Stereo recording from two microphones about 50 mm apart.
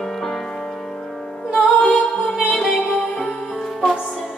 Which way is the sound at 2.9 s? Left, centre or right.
Centre.